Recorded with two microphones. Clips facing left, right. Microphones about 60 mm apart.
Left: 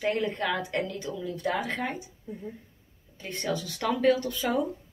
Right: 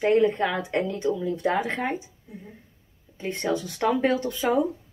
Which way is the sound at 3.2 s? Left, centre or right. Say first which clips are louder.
Right 5 dB; right.